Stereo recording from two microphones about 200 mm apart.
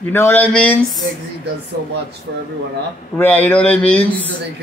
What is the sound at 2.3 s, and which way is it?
Speech, 75° right (ahead or behind).